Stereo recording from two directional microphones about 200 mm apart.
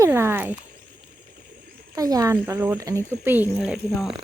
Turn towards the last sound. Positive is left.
turn(degrees=0)  # may be behind; listen again after turning